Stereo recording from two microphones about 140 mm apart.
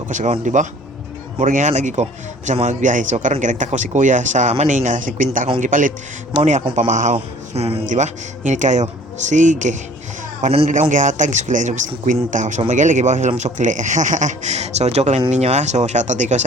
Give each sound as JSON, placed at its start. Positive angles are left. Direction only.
{"t": 0.1, "sound": "a man's voice", "side_deg": -60}
{"t": 6.3, "sound": "speech", "side_deg": -50}
{"t": 7.9, "sound": "speech", "side_deg": -60}
{"t": 10.4, "sound": "speech", "side_deg": -45}
{"t": 10.7, "sound": "speech", "side_deg": -65}